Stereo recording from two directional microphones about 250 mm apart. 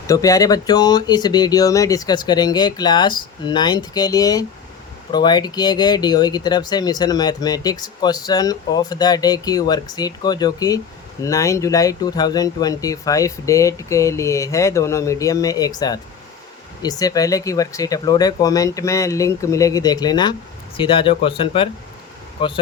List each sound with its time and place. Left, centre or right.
0.1 s speech: centre